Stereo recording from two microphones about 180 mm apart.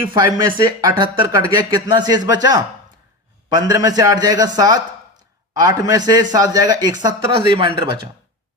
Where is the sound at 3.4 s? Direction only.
20° right (ahead or behind).